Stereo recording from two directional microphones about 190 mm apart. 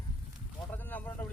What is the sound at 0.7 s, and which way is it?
Vehicle, 10° left (ahead or behind).